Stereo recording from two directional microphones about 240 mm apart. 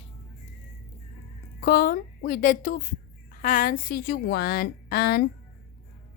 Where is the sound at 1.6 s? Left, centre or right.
Left.